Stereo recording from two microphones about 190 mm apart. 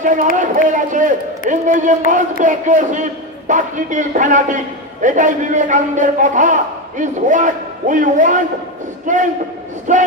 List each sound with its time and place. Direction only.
0.0 s a man's voice: 40° right (ahead or behind)